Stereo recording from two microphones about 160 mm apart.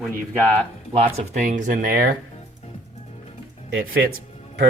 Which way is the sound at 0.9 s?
40° right (ahead or behind).